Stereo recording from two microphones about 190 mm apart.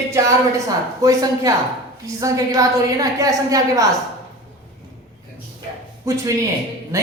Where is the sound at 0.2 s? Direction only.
15° right (ahead or behind).